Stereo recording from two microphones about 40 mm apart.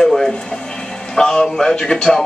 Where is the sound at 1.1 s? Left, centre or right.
Centre.